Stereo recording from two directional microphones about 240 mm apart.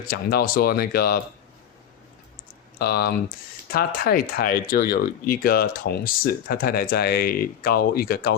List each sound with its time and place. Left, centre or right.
0.0 s speech: left
2.7 s speech: left